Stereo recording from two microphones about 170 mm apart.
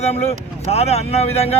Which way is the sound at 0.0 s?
40° left (ahead or behind).